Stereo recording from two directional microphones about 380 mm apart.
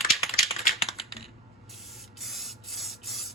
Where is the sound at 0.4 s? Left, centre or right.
Centre.